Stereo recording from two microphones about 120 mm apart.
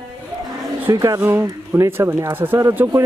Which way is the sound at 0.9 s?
25° right (ahead or behind).